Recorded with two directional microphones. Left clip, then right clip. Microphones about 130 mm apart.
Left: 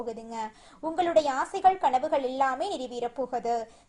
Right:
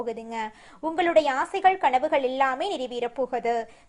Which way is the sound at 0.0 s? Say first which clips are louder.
Right 4 dB; 20° right (ahead or behind).